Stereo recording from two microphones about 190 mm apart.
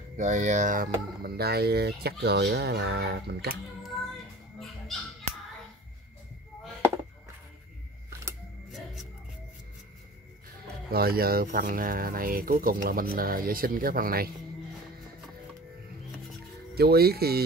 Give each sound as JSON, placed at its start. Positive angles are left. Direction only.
{"t": 0.2, "sound": "speech", "side_deg": -40}
{"t": 10.9, "sound": "speech", "side_deg": -55}
{"t": 16.7, "sound": "speech", "side_deg": -55}